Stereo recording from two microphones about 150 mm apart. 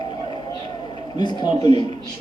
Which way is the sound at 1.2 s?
30° left (ahead or behind).